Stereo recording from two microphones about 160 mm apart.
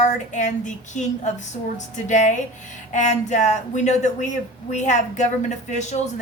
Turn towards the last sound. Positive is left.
turn(degrees=50)  # may be behind; listen again after turning